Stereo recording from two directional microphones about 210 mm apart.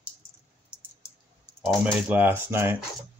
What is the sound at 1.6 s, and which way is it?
Speech, 5° right (ahead or behind).